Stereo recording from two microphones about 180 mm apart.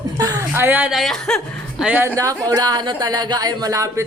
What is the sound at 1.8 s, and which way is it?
Speech, 10° right (ahead or behind).